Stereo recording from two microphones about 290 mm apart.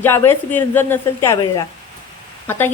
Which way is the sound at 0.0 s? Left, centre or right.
Centre.